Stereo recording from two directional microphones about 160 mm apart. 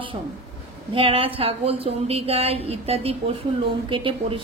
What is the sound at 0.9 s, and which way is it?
A woman's voice, 35° right (ahead or behind).